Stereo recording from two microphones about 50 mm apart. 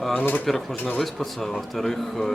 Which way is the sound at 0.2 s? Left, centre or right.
Left.